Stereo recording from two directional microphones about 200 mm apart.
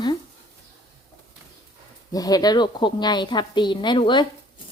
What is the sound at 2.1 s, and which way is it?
A woman's voice, 20° left (ahead or behind).